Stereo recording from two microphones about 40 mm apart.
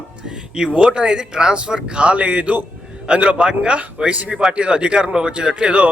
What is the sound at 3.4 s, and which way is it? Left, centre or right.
Speech, right.